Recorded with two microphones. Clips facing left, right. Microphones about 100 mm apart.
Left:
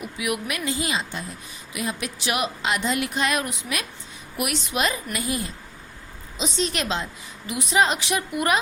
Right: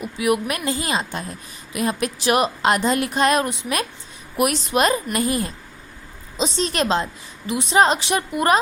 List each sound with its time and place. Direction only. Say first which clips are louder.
0.0 s a woman's voice: right 7 dB; 35° right (ahead or behind)
6.3 s a woman's voice: right 4 dB; 35° right (ahead or behind)